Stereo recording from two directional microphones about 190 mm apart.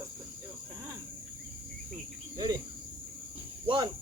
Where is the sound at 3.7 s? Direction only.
25° right (ahead or behind).